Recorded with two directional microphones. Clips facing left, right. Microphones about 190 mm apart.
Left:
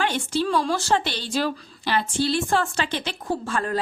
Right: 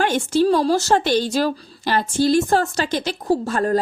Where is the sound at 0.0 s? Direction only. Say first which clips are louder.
Right 6 dB; 45° right (ahead or behind).